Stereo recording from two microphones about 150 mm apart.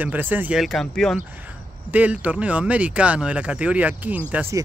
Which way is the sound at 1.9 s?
10° right (ahead or behind).